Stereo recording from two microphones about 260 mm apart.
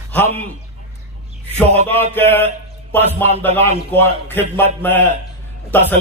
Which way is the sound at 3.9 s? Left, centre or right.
Centre.